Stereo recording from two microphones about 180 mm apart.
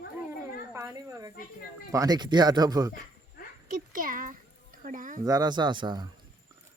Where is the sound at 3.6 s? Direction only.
50° right (ahead or behind).